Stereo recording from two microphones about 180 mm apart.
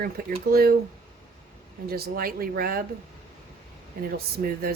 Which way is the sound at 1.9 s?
55° right (ahead or behind).